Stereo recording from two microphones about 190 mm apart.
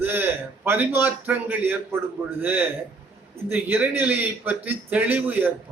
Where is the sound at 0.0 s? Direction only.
10° right (ahead or behind).